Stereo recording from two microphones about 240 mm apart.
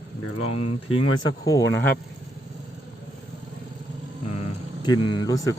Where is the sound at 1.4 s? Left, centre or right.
Centre.